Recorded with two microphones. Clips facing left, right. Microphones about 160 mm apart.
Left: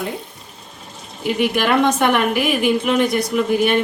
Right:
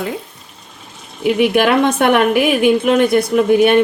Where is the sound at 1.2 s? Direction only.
55° right (ahead or behind).